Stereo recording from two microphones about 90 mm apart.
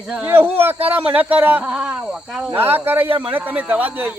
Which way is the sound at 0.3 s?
25° right (ahead or behind).